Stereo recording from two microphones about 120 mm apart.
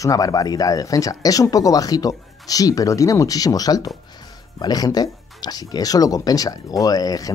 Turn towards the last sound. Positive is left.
turn(degrees=30)  # may be behind; listen again after turning